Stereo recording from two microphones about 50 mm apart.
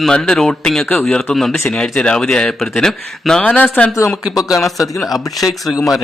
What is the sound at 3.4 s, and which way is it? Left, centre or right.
Speech, left.